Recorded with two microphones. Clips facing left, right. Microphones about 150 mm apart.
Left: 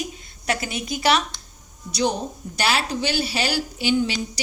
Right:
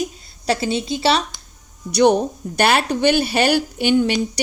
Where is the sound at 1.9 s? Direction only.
60° right (ahead or behind).